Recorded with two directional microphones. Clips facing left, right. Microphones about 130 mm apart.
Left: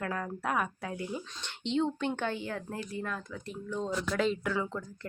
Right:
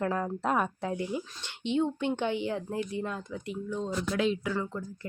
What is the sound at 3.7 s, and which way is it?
Speech, 5° right (ahead or behind).